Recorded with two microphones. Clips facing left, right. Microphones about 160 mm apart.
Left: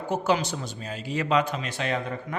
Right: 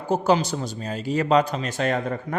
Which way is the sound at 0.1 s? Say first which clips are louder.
Right 5 dB; 35° right (ahead or behind).